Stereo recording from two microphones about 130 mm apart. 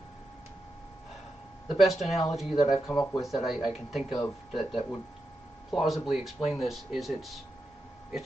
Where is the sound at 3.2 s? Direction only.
Centre (ahead or behind).